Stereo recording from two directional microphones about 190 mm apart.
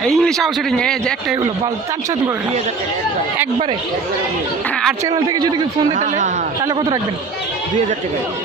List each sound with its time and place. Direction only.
0.0 s a man's voice: 5° left (ahead or behind)
5.0 s a man's voice: 20° right (ahead or behind)
5.9 s speech: 40° right (ahead or behind)
6.7 s a man's voice: 20° right (ahead or behind)